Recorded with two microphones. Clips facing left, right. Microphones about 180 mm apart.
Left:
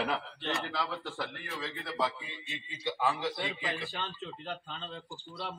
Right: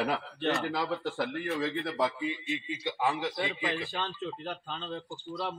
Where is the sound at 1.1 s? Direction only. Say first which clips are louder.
Right 8 dB; 20° right (ahead or behind).